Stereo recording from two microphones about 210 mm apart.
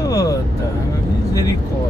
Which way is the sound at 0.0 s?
15° left (ahead or behind).